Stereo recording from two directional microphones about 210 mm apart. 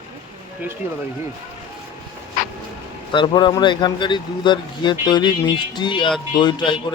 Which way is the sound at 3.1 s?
20° left (ahead or behind).